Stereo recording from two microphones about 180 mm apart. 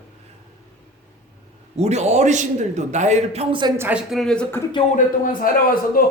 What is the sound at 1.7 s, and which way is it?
A man's voice, 35° right (ahead or behind).